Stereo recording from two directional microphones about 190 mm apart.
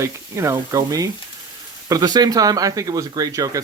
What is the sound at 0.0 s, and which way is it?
Speech, 15° right (ahead or behind).